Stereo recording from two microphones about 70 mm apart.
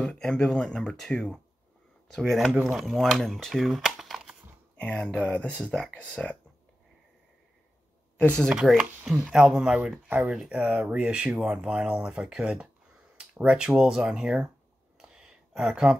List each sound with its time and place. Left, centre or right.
0.0 s speech: centre
0.9 s speech: centre
2.6 s speech: centre
4.7 s speech: centre
8.2 s speech: centre
8.7 s speech: centre
10.0 s speech: right
15.0 s a sound: centre